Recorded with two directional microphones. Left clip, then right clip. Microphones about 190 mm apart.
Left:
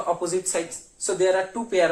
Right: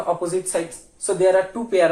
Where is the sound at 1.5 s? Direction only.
25° left (ahead or behind).